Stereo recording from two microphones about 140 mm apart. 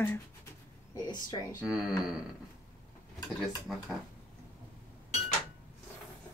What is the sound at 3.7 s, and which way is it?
Speech, 5° right (ahead or behind).